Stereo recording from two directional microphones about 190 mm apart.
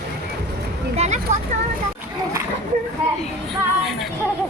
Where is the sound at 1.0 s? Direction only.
35° right (ahead or behind).